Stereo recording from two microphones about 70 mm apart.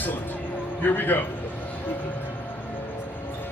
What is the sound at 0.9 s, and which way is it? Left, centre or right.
Speech, left.